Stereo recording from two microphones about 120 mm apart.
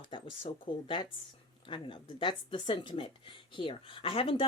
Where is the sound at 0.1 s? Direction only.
45° left (ahead or behind).